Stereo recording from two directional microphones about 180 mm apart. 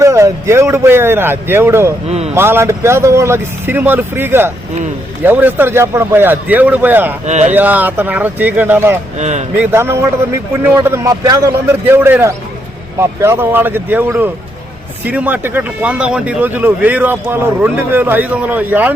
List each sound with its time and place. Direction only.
0.0 s speech: 15° right (ahead or behind)
2.0 s a man's voice: 35° right (ahead or behind)
2.3 s speech: 15° right (ahead or behind)
7.3 s a man's voice: 40° right (ahead or behind)
7.5 s speech: 10° right (ahead or behind)
9.1 s a man's voice: 40° right (ahead or behind)
9.6 s speech: 15° right (ahead or behind)